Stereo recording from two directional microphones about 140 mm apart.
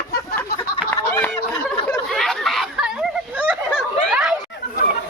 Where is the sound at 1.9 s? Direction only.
Centre (ahead or behind).